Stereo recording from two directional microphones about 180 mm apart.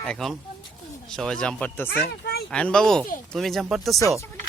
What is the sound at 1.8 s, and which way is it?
Speech, 60° left (ahead or behind).